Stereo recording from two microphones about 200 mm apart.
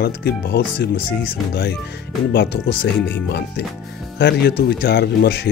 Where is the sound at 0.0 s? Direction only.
55° left (ahead or behind).